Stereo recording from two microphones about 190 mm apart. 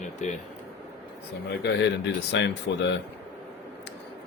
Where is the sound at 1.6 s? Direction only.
65° left (ahead or behind).